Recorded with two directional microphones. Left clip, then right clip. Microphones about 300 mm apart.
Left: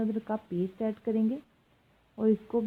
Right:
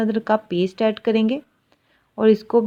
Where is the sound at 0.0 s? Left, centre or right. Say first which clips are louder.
Right 13 dB; centre.